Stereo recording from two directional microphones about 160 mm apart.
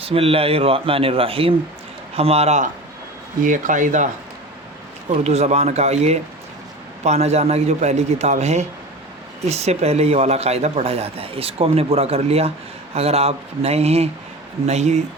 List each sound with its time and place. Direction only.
0.0 s a man's voice: 35° right (ahead or behind)
3.4 s a man's voice: 55° right (ahead or behind)
5.1 s a man's voice: 45° right (ahead or behind)